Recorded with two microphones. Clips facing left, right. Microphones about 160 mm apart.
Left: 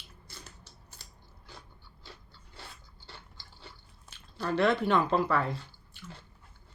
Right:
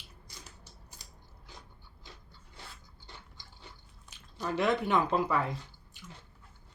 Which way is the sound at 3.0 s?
15° right (ahead or behind).